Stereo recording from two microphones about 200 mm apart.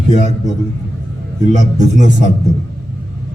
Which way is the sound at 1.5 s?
35° right (ahead or behind).